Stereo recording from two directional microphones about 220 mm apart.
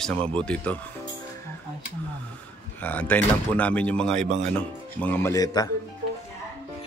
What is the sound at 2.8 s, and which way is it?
Speech, 5° left (ahead or behind).